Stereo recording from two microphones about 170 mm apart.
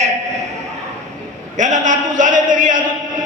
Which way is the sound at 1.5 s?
45° right (ahead or behind).